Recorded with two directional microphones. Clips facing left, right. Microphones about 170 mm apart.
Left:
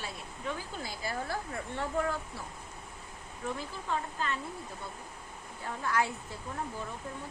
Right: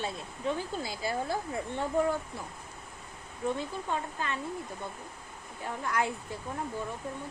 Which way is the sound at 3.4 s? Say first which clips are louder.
Right 4 dB; 20° right (ahead or behind).